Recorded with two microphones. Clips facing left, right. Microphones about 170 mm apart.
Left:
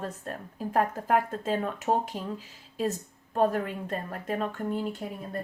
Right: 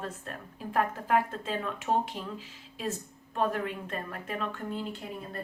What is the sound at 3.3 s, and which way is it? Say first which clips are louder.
A woman's voice: left 4 dB; 40° left (ahead or behind).